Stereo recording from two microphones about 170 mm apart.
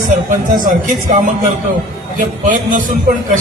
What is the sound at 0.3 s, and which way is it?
A man's voice, 50° right (ahead or behind).